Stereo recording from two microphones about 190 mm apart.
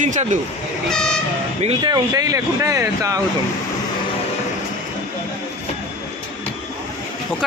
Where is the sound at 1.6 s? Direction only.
25° right (ahead or behind).